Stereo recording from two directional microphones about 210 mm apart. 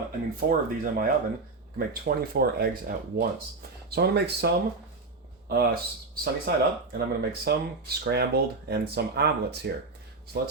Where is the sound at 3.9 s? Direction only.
50° right (ahead or behind).